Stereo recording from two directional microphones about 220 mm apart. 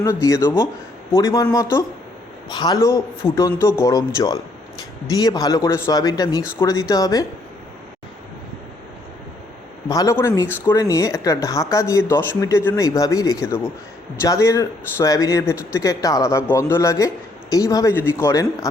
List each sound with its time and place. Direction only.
0.0 s speech: 15° left (ahead or behind)
9.9 s speech: 15° left (ahead or behind)